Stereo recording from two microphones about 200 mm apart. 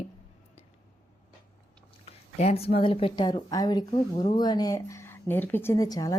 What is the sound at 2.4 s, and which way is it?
A woman's voice, 30° left (ahead or behind).